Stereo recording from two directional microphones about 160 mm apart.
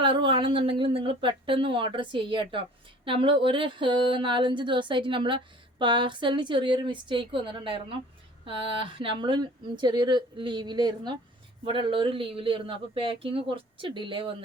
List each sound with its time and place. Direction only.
0.0 s speech: 30° right (ahead or behind)